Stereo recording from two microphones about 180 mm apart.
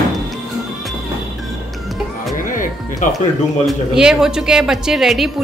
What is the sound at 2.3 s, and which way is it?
Music, 50° left (ahead or behind).